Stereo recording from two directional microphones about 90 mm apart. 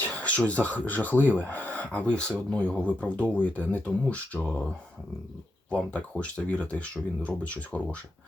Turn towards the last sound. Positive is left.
turn(degrees=15)  # may be behind; listen again after turning